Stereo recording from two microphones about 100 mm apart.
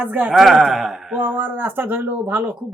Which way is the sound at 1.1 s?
20° right (ahead or behind).